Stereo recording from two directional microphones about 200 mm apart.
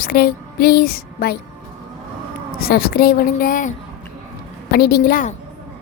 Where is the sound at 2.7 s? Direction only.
50° left (ahead or behind).